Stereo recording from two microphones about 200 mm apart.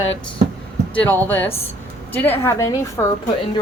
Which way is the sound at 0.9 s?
10° left (ahead or behind).